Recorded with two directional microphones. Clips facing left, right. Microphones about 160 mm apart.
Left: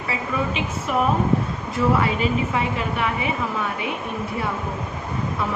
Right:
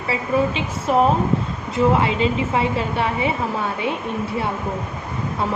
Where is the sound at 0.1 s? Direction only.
30° right (ahead or behind).